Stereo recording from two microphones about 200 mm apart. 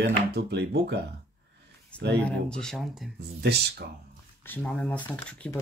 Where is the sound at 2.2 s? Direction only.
5° left (ahead or behind).